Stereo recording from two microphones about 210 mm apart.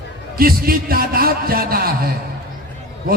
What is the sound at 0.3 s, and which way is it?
A man's voice, 45° right (ahead or behind).